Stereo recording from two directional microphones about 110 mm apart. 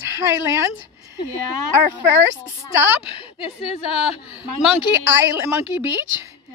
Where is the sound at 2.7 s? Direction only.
20° right (ahead or behind).